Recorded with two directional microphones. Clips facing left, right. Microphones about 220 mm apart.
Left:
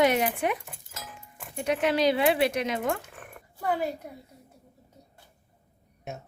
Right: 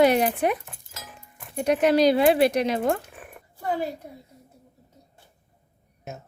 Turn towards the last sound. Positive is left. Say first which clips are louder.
# even
turn(degrees=0)  # may be behind; listen again after turning